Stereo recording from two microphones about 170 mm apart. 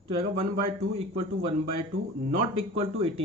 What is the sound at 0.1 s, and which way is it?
A man's voice, 35° right (ahead or behind).